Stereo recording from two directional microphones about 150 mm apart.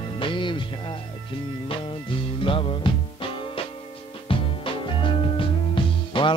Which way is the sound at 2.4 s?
35° left (ahead or behind).